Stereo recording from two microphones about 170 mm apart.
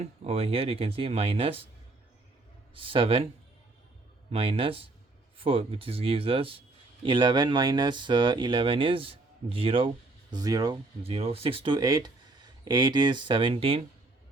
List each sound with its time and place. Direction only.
0.0 s speech: 35° right (ahead or behind)
2.7 s speech: 30° right (ahead or behind)
4.3 s speech: 35° right (ahead or behind)
11.0 s speech: 35° right (ahead or behind)